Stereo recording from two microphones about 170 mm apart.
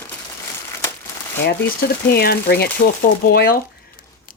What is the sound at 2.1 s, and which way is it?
Speech, 65° left (ahead or behind).